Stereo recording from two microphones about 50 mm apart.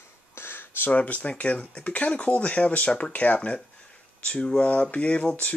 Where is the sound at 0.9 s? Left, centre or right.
Left.